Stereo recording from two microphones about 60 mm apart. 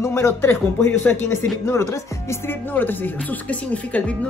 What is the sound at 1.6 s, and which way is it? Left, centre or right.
Speech, left.